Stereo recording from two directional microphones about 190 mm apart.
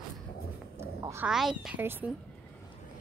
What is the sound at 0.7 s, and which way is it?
Cat, 15° right (ahead or behind).